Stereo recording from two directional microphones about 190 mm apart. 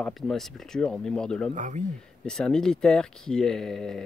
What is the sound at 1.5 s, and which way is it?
Speech, 40° right (ahead or behind).